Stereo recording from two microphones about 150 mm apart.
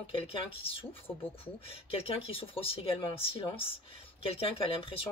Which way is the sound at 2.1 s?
35° left (ahead or behind).